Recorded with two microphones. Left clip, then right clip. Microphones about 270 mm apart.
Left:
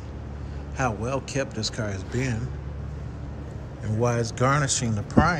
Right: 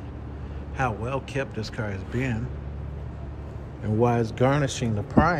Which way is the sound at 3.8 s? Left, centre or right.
Centre.